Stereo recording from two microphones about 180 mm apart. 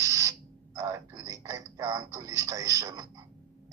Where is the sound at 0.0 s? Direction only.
20° right (ahead or behind).